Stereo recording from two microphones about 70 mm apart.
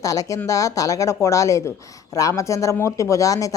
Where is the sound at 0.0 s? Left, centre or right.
Left.